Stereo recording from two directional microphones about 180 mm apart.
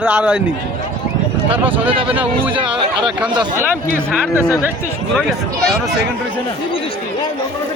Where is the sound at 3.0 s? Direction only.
5° right (ahead or behind).